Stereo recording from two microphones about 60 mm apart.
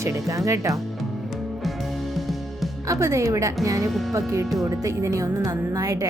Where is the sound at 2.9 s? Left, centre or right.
Right.